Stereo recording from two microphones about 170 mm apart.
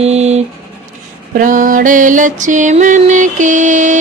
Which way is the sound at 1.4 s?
50° right (ahead or behind).